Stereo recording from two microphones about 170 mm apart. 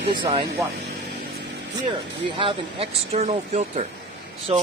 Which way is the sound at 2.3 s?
30° right (ahead or behind).